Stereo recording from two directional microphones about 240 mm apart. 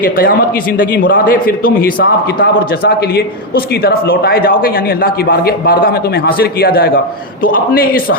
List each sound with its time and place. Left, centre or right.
0.0 s a man's voice: left